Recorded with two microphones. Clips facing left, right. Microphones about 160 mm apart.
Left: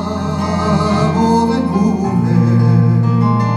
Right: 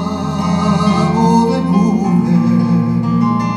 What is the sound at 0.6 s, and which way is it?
Music, 20° right (ahead or behind).